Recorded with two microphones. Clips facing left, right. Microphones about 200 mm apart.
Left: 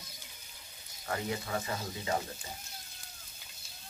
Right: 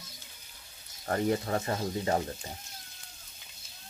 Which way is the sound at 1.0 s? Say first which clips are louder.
Right 7 dB; 45° right (ahead or behind).